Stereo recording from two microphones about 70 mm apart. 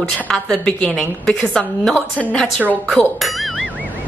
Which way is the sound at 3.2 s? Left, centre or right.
Centre.